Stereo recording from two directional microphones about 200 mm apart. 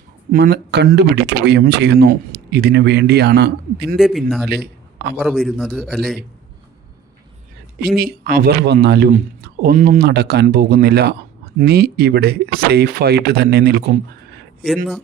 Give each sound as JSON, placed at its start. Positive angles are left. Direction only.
{"t": 0.3, "sound": "speech", "side_deg": -45}
{"t": 3.9, "sound": "a man's voice", "side_deg": 0}
{"t": 4.4, "sound": "a man's voice", "side_deg": -50}
{"t": 5.1, "sound": "a man's voice", "side_deg": 0}
{"t": 7.8, "sound": "speech", "side_deg": -50}
{"t": 9.0, "sound": "speech", "side_deg": -45}